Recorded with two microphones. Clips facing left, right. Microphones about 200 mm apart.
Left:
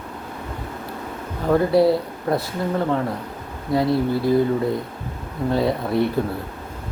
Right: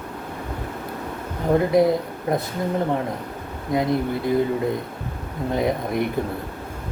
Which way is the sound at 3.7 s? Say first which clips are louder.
Left 2 dB; 20° right (ahead or behind).